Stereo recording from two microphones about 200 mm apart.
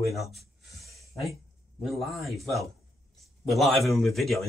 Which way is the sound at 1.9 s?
Centre (ahead or behind).